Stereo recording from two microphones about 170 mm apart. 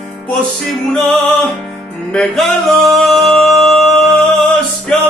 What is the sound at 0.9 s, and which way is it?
Music, centre (ahead or behind).